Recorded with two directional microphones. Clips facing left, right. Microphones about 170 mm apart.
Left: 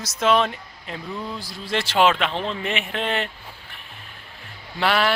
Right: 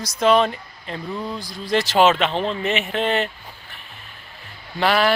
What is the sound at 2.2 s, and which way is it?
Speech, 35° right (ahead or behind).